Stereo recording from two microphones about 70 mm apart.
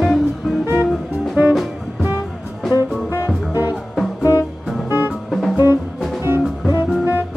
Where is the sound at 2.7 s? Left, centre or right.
Left.